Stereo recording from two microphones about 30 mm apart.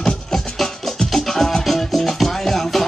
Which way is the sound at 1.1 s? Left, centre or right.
Centre.